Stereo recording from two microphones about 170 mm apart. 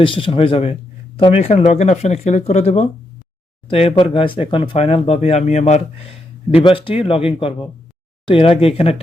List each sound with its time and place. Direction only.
0.0 s speech: 30° left (ahead or behind)
6.5 s speech: 30° left (ahead or behind)